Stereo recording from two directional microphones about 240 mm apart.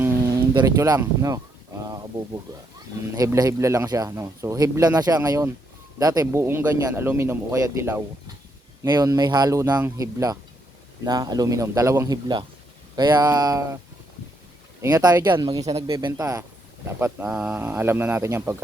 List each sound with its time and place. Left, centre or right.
0.0 s guitar: centre
3.2 s speech: centre
14.8 s speech: centre